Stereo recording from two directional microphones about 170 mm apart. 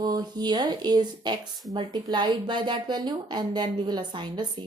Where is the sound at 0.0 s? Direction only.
25° right (ahead or behind).